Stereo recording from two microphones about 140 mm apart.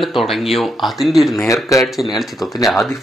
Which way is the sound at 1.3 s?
20° left (ahead or behind).